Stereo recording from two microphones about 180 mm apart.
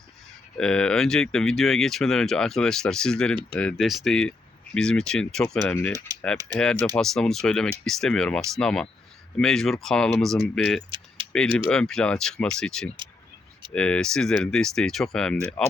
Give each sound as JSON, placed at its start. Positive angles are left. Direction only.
{"t": 0.5, "sound": "speech", "side_deg": 5}
{"t": 6.1, "sound": "typing", "side_deg": -20}
{"t": 6.6, "sound": "speech", "side_deg": 5}